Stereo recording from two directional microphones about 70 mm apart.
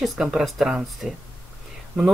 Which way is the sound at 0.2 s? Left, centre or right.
Centre.